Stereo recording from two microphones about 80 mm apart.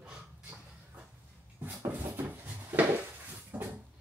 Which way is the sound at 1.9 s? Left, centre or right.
Right.